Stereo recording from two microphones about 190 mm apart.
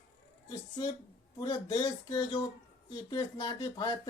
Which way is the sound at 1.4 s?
25° left (ahead or behind).